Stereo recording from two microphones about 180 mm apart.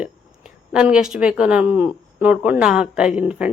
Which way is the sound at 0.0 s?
5° right (ahead or behind).